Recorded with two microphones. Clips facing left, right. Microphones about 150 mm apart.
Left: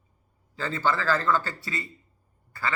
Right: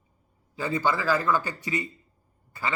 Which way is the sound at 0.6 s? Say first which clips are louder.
Right 1 dB; 15° right (ahead or behind).